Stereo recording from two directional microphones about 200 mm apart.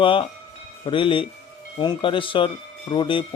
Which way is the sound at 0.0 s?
25° left (ahead or behind).